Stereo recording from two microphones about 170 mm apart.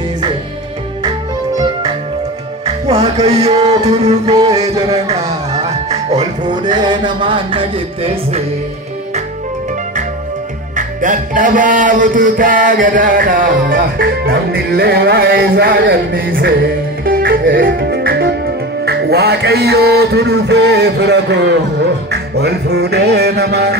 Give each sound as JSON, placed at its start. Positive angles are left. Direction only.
{"t": 2.6, "sound": "music", "side_deg": -35}
{"t": 4.3, "sound": "music", "side_deg": -25}
{"t": 6.1, "sound": "speech", "side_deg": -25}
{"t": 10.8, "sound": "music", "side_deg": -50}
{"t": 22.1, "sound": "music", "side_deg": -75}